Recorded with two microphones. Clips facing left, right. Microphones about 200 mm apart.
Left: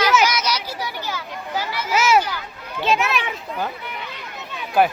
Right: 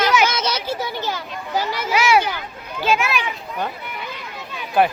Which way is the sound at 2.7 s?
Centre (ahead or behind).